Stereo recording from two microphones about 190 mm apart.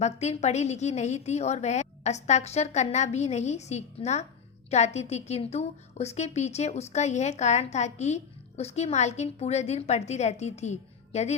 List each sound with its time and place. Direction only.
0.0 s a woman's voice: 35° left (ahead or behind)